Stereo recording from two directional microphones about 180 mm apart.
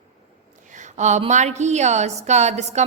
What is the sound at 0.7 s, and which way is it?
A woman's voice, 45° right (ahead or behind).